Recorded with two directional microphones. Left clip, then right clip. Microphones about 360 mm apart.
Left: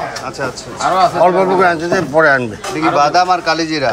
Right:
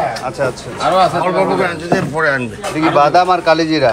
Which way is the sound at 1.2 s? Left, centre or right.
Left.